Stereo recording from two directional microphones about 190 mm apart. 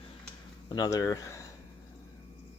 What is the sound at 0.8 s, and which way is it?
Speech, 20° left (ahead or behind).